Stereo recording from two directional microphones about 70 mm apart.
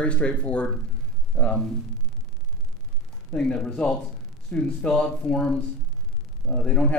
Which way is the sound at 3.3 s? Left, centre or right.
Centre.